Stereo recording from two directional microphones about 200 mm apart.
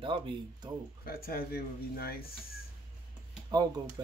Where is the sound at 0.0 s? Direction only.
25° right (ahead or behind).